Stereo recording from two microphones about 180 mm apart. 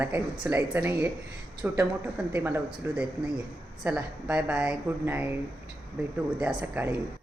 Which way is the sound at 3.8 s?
5° right (ahead or behind).